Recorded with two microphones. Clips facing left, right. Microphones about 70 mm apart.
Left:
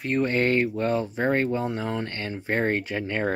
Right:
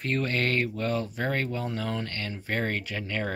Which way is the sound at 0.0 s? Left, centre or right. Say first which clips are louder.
Left 5 dB; centre.